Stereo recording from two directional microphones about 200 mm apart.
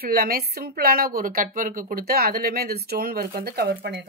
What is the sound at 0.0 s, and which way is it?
A woman's voice, 50° right (ahead or behind).